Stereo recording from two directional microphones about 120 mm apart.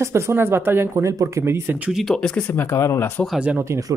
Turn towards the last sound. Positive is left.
turn(degrees=-20)  # may be behind; listen again after turning